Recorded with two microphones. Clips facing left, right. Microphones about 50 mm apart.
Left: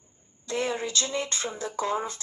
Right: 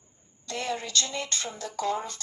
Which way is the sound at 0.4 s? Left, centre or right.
Left.